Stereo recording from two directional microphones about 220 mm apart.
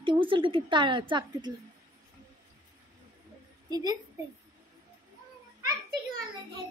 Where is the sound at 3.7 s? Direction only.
15° right (ahead or behind).